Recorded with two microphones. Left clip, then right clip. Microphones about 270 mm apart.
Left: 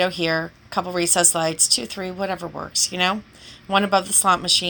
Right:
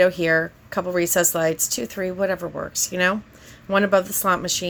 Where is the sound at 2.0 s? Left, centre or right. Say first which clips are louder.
Right 4 dB; left.